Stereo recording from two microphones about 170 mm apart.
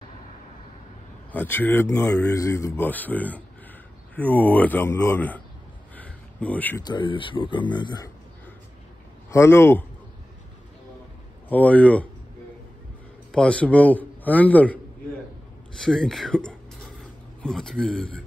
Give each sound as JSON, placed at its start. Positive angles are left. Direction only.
{"t": 1.3, "sound": "a man's voice", "side_deg": 10}
{"t": 5.9, "sound": "a sound", "side_deg": 10}
{"t": 6.8, "sound": "speech", "side_deg": 25}
{"t": 9.3, "sound": "a man's voice", "side_deg": 15}
{"t": 11.4, "sound": "a man's voice", "side_deg": 10}
{"t": 13.3, "sound": "a man's voice", "side_deg": 5}
{"t": 15.8, "sound": "speech", "side_deg": 5}